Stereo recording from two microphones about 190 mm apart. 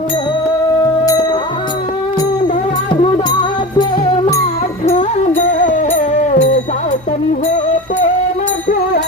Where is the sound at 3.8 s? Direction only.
25° left (ahead or behind).